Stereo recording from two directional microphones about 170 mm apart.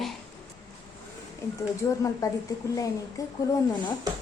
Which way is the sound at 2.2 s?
20° left (ahead or behind).